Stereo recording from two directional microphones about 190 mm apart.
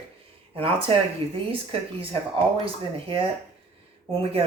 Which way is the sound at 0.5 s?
30° right (ahead or behind).